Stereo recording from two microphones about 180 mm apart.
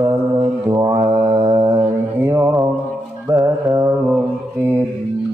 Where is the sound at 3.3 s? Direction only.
15° right (ahead or behind).